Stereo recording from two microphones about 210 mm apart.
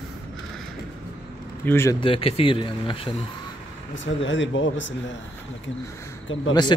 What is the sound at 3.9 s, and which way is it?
Speech, 65° left (ahead or behind).